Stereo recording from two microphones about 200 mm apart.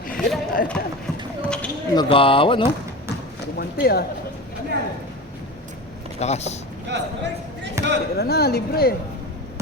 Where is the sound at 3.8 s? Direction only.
50° left (ahead or behind).